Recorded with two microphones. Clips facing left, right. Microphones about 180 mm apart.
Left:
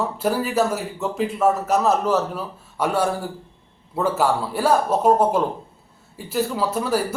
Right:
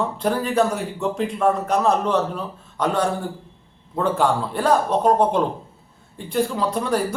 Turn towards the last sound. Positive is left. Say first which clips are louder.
# even
turn(degrees=5)  # may be behind; listen again after turning